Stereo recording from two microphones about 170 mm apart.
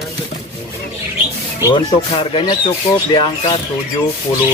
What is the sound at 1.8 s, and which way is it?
Speech, 30° left (ahead or behind).